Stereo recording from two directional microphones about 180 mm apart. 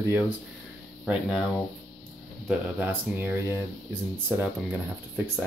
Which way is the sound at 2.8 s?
10° right (ahead or behind).